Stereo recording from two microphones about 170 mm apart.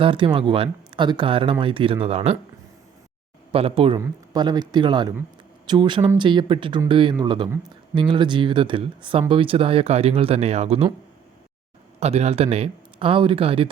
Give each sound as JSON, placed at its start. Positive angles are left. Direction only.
{"t": 0.0, "sound": "speech", "side_deg": -30}
{"t": 3.5, "sound": "speech", "side_deg": -35}
{"t": 11.9, "sound": "speech", "side_deg": -40}